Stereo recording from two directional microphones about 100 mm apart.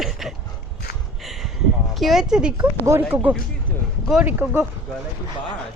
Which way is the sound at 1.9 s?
5° right (ahead or behind).